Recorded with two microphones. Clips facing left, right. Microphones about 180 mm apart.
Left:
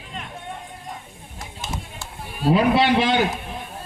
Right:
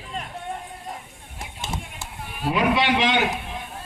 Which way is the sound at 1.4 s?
25° right (ahead or behind).